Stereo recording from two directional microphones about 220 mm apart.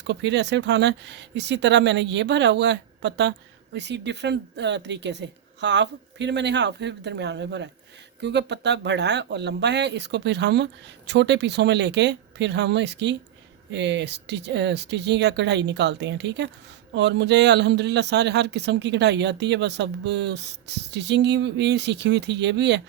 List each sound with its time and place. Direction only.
0.1 s speech: 50° right (ahead or behind)